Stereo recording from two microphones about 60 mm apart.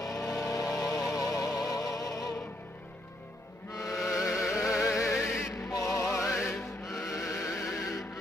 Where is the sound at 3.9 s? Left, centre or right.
Centre.